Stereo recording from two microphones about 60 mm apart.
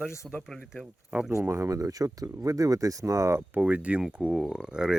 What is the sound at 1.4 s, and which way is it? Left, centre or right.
Speech, right.